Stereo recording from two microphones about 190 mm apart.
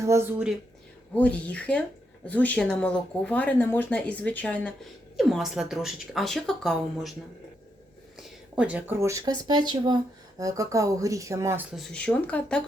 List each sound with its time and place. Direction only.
0.0 s speech: 15° right (ahead or behind)
1.1 s speech: 10° left (ahead or behind)
8.2 s speech: 5° right (ahead or behind)
11.7 s speech: centre (ahead or behind)